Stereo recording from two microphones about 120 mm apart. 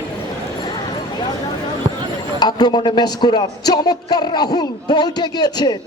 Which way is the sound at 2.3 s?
35° left (ahead or behind).